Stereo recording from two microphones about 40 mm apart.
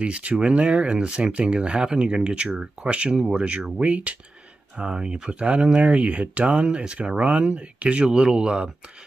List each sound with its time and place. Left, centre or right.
0.0 s speech: right
2.9 s speech: right
4.7 s speech: right